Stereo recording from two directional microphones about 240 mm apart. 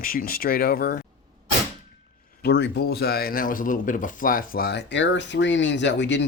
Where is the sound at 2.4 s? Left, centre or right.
Left.